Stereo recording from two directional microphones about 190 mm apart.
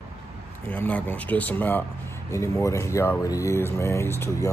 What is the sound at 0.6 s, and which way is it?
Speech, 10° left (ahead or behind).